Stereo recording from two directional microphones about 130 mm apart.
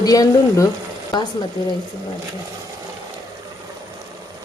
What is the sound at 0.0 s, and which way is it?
Speech, 25° left (ahead or behind).